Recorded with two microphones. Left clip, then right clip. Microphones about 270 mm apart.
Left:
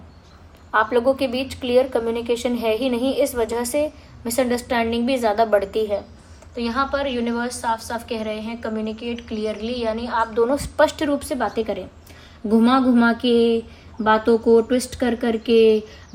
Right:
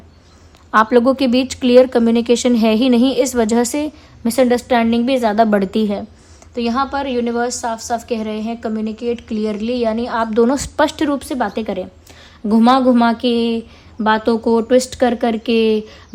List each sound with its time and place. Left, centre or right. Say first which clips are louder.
0.7 s a woman's voice: right 6 dB; right
6.6 s a woman's voice: right 3 dB; right